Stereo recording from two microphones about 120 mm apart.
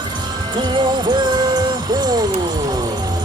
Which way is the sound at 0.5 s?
40° right (ahead or behind).